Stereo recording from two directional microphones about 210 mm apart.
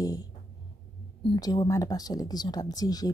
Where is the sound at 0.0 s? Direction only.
15° left (ahead or behind).